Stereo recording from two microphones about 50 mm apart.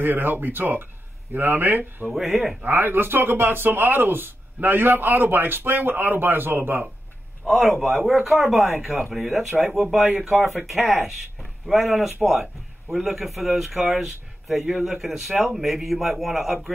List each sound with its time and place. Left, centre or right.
0.0 s speech: right
2.1 s speech: centre
2.6 s speech: right
7.4 s speech: centre